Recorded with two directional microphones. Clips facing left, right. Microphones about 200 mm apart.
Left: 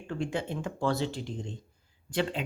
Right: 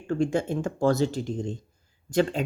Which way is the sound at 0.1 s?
45° right (ahead or behind).